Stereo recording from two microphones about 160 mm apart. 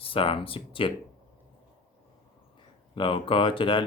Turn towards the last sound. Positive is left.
turn(degrees=35)  # may be behind; listen again after turning